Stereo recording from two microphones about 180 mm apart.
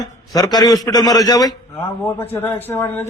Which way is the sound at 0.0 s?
20° left (ahead or behind).